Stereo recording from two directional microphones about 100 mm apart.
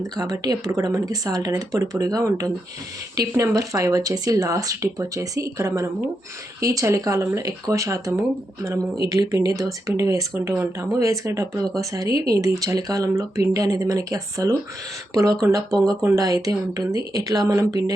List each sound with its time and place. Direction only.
0.0 s speech: 40° right (ahead or behind)